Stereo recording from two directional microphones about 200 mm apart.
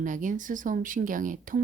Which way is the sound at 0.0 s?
40° right (ahead or behind).